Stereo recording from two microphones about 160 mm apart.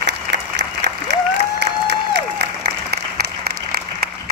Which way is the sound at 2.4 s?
80° right.